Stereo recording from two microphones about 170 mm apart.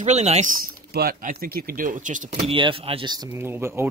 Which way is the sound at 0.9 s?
65° right (ahead or behind).